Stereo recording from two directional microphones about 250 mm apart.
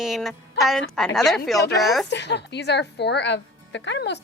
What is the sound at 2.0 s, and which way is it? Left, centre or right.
A woman's voice, left.